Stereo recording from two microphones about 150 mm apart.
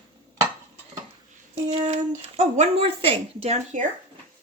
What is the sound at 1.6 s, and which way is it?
Speech, 50° right (ahead or behind).